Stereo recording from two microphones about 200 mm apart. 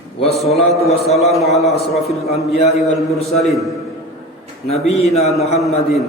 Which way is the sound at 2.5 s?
30° left (ahead or behind).